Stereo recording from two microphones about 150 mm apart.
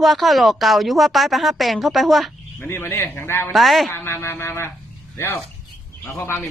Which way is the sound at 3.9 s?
15° left (ahead or behind).